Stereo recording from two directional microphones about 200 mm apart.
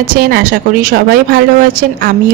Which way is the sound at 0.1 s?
45° right (ahead or behind).